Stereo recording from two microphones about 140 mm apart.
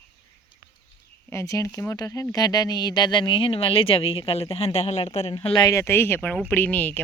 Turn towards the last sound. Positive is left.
turn(degrees=15)  # may be behind; listen again after turning